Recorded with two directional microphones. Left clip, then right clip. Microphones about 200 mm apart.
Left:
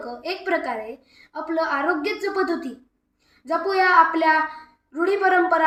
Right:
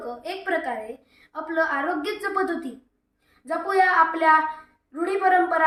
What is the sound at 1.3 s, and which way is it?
A woman's voice, 15° right (ahead or behind).